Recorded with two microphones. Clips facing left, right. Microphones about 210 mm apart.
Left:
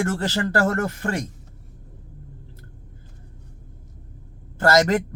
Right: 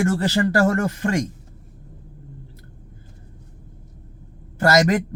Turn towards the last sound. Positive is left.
turn(degrees=-15)  # may be behind; listen again after turning